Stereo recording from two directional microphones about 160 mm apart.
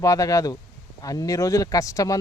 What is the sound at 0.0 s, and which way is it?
Speech, 20° left (ahead or behind).